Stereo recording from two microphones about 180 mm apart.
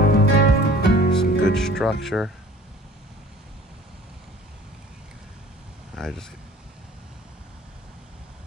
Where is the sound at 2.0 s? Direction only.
5° right (ahead or behind).